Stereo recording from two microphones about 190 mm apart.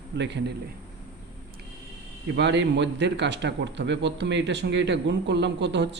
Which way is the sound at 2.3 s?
70° right (ahead or behind).